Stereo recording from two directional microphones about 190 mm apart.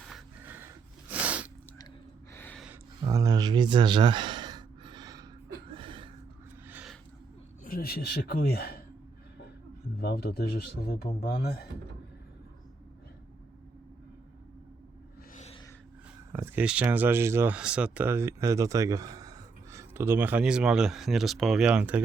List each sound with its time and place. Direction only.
0.1 s snort: 10° right (ahead or behind)
2.3 s gasp: 10° left (ahead or behind)
3.0 s sigh: 20° right (ahead or behind)
5.6 s chuckle: 25° right (ahead or behind)
6.7 s a sound: 10° right (ahead or behind)
7.6 s speech: 50° left (ahead or behind)
10.0 s speech: 55° left (ahead or behind)
16.3 s speech: 10° right (ahead or behind)